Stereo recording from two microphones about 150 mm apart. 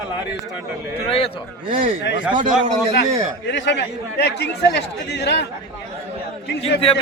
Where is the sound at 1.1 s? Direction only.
40° left (ahead or behind).